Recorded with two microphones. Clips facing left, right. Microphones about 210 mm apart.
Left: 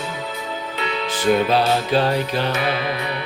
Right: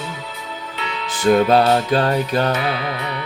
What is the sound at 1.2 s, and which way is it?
Music, 45° right (ahead or behind).